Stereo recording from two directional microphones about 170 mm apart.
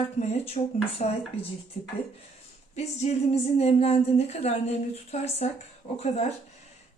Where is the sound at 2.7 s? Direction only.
40° left (ahead or behind).